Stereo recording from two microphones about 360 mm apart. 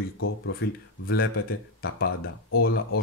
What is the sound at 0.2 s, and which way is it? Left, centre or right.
Speech, left.